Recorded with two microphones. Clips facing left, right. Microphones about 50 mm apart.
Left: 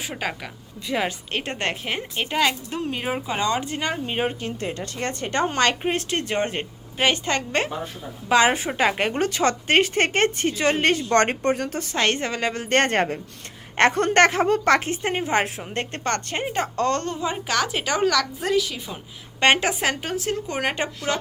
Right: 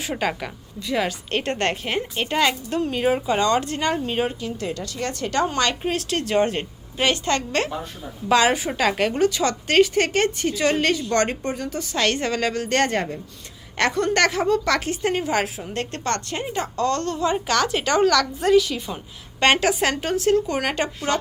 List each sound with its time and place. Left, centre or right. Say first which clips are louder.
0.0 s speech: right 4 dB; centre
0.8 s speech: right 1 dB; left
1.3 s a woman's voice: right 3 dB; centre
4.4 s a woman's voice: right 1 dB; left; by 8.5 s centre
8.5 s a woman's voice: even; left
11.8 s speech: even; left
12.6 s a woman's voice: left 5 dB; left
17.1 s a woman's voice: right 4 dB; centre